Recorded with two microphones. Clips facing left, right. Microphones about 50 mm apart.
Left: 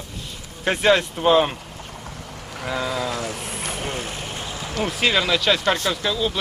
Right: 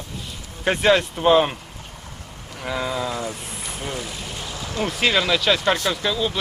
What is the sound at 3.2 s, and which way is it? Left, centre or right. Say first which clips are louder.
Vehicle: left 1 dB; left.